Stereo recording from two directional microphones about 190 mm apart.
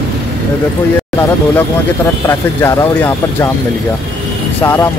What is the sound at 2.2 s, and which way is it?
Speech, 15° left (ahead or behind).